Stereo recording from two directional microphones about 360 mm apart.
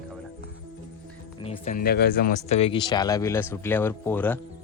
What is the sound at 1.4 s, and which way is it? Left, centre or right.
Speech, centre.